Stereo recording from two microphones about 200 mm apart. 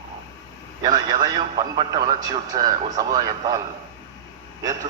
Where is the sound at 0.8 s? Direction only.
20° right (ahead or behind).